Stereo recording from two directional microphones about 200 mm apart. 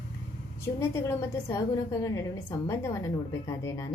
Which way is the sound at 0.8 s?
15° left (ahead or behind).